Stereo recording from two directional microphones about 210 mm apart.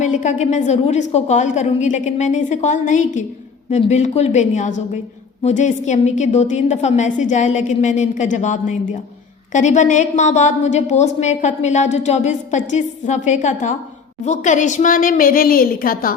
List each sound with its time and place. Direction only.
0.0 s a woman's voice: 35° left (ahead or behind)